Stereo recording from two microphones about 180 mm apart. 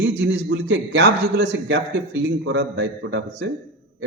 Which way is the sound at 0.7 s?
75° right (ahead or behind).